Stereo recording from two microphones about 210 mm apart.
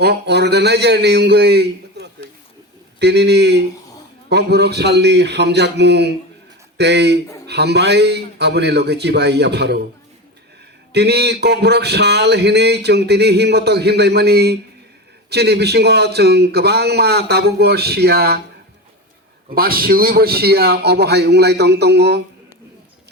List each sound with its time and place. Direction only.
0.0 s a man's voice: 50° right (ahead or behind)
10.9 s a man's voice: 50° right (ahead or behind)
19.5 s a man's voice: 45° right (ahead or behind)